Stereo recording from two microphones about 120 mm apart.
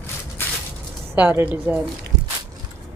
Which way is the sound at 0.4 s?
20° left (ahead or behind).